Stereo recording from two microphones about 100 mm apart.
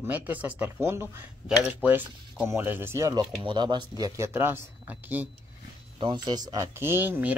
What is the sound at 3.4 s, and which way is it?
Speech, 50° right (ahead or behind).